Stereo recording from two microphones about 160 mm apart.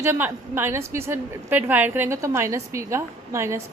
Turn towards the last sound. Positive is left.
turn(degrees=-15)  # may be behind; listen again after turning